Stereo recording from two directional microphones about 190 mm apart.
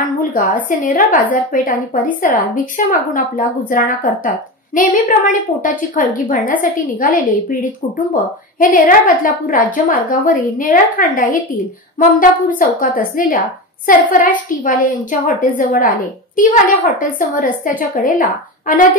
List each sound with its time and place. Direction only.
0.2 s a woman's voice: 45° left (ahead or behind)
8.5 s a woman's voice: 45° left (ahead or behind)